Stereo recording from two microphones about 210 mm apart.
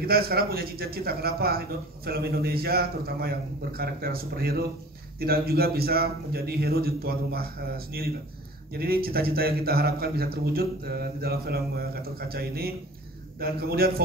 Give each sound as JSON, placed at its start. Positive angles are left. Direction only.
{"t": 0.0, "sound": "speech", "side_deg": -45}